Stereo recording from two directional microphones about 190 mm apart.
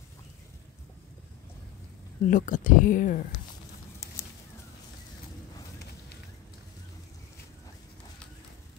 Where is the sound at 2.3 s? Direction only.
45° left (ahead or behind).